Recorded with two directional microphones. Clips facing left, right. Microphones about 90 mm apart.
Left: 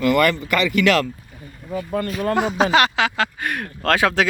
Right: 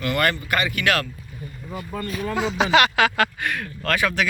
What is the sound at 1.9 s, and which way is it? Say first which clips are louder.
Speech: left 5 dB; 65° left (ahead or behind).